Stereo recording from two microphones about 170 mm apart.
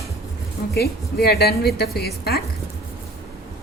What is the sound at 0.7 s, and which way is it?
A woman's voice, 70° left (ahead or behind).